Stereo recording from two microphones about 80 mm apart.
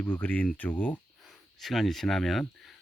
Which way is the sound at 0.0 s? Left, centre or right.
Left.